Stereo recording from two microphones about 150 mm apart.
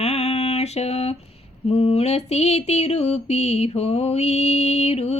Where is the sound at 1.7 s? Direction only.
40° left (ahead or behind).